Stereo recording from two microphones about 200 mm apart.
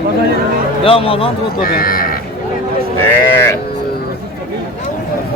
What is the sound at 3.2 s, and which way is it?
Sheep, 10° left (ahead or behind).